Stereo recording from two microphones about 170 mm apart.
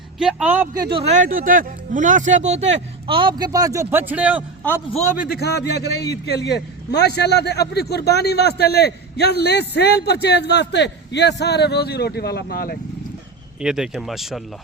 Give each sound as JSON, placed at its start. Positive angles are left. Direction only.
{"t": 0.2, "sound": "a man's voice", "side_deg": -5}
{"t": 4.9, "sound": "a man's voice", "side_deg": 40}
{"t": 5.3, "sound": "a man's voice", "side_deg": 70}
{"t": 13.6, "sound": "speech", "side_deg": -5}